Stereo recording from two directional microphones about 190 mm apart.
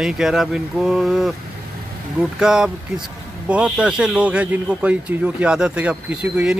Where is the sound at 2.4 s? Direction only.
5° right (ahead or behind).